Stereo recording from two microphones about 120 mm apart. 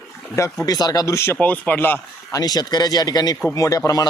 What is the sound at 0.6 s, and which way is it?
Speech, 30° left (ahead or behind).